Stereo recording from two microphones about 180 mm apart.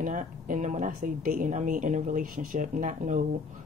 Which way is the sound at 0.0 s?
45° right (ahead or behind).